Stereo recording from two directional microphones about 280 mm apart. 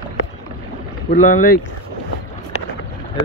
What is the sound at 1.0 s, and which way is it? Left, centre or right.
Speech, left.